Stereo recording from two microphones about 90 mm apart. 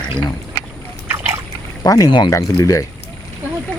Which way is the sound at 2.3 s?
35° left (ahead or behind).